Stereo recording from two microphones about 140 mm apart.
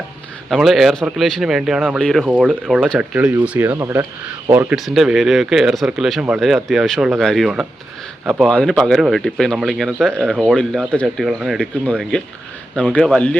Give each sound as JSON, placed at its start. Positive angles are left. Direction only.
{"t": 0.5, "sound": "speech", "side_deg": 0}
{"t": 4.5, "sound": "speech", "side_deg": -5}